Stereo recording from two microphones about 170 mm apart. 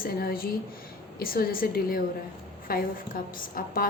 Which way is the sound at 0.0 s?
60° left (ahead or behind).